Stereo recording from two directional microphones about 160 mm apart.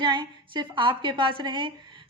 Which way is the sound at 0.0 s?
30° right (ahead or behind).